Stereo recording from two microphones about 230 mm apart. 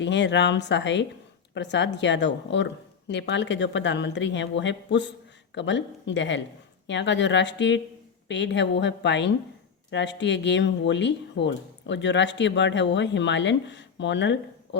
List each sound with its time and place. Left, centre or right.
0.0 s speech: left